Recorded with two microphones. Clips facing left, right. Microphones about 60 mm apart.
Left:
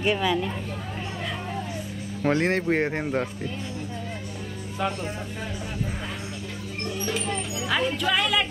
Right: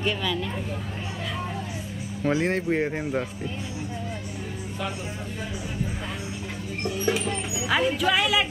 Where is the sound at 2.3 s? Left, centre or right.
Centre.